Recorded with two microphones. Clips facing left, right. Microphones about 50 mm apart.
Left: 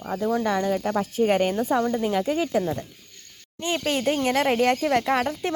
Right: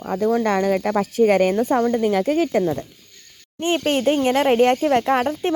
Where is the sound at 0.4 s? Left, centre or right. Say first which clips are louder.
Right 4 dB; right.